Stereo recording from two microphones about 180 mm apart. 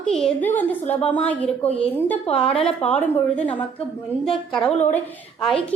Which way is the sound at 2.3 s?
35° left (ahead or behind).